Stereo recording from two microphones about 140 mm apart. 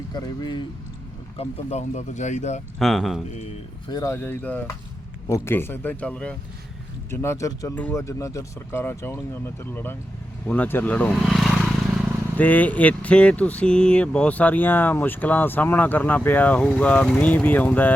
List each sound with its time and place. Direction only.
0.1 s speech: 30° left (ahead or behind)
1.4 s speech: 55° left (ahead or behind)
2.7 s speech: centre (ahead or behind)
3.8 s speech: 25° left (ahead or behind)
7.8 s speech: 10° left (ahead or behind)
8.0 s speech: 20° left (ahead or behind); by 12.0 s centre (ahead or behind)
12.4 s speech: 10° left (ahead or behind)